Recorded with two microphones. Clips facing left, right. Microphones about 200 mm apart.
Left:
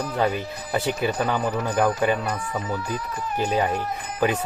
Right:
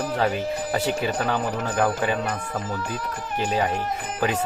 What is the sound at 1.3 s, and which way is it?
Speech, 10° left (ahead or behind).